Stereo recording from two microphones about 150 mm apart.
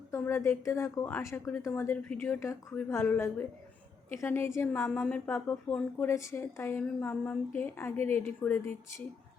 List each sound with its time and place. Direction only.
0.1 s a woman's voice: 15° left (ahead or behind)